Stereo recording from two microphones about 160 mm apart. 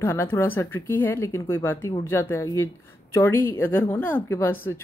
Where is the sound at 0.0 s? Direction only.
15° left (ahead or behind).